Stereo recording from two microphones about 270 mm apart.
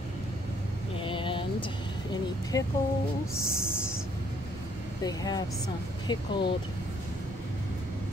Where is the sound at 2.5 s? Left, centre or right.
Centre.